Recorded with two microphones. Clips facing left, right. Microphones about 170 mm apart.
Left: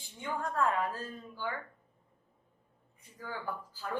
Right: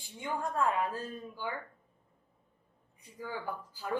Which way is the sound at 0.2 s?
15° right (ahead or behind).